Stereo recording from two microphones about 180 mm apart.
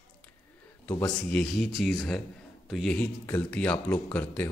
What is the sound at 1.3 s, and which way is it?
A man's voice, centre (ahead or behind).